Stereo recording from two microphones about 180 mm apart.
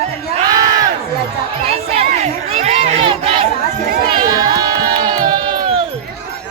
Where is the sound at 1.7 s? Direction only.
35° right (ahead or behind).